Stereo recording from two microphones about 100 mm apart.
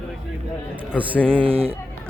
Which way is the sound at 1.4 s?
75° right (ahead or behind).